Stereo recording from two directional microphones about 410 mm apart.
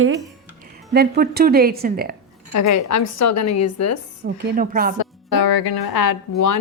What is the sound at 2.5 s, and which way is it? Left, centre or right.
Speech, left.